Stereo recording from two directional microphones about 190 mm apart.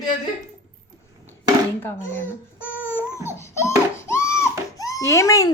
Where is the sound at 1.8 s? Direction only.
10° left (ahead or behind).